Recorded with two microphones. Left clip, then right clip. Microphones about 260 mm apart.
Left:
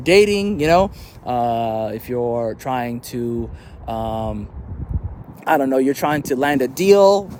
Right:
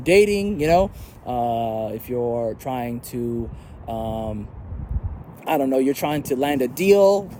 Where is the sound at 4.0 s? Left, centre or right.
Left.